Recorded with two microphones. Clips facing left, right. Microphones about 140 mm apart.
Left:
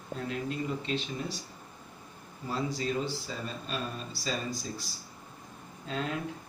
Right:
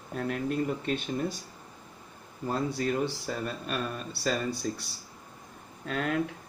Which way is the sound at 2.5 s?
60° right (ahead or behind).